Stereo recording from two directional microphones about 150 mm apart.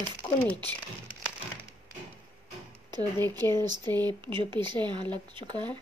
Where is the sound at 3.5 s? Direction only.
25° right (ahead or behind).